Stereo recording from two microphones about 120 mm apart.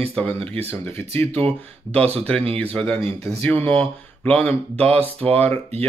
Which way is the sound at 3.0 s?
65° right (ahead or behind).